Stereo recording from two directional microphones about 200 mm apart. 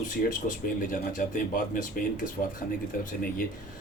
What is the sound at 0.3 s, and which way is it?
Speech, 45° left (ahead or behind).